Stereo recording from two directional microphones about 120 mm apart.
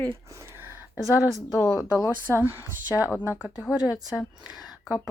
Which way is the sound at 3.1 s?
15° left (ahead or behind).